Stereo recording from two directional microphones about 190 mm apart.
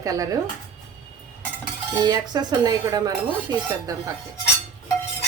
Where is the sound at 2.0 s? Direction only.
20° right (ahead or behind).